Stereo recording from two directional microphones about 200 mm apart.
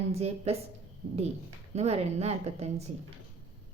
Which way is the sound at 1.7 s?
30° right (ahead or behind).